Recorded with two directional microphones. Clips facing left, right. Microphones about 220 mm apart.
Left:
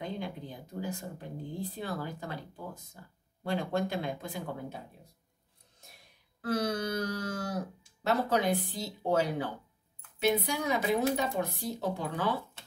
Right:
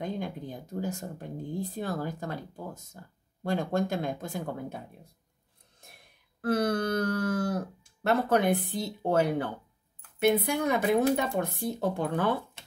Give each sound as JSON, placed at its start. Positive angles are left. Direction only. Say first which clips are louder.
{"t": 0.0, "sound": "speech", "louder": "right 4 dB", "side_deg": -45}
{"t": 6.4, "sound": "speech", "louder": "right 4 dB", "side_deg": -55}